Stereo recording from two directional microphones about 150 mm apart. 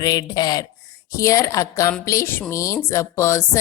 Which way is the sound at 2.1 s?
15° left (ahead or behind).